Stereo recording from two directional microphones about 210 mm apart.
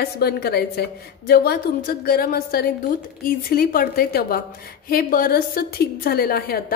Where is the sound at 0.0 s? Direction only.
50° left (ahead or behind).